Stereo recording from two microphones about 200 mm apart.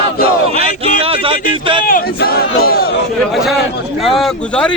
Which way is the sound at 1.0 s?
30° right (ahead or behind).